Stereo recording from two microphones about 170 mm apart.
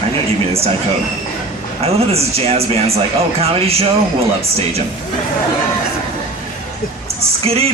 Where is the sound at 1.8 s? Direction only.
35° right (ahead or behind).